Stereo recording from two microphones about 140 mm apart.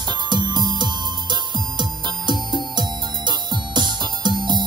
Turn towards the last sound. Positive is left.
turn(degrees=-30)  # may be behind; listen again after turning